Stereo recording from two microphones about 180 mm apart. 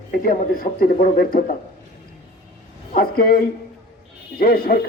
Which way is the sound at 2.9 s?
55° left (ahead or behind).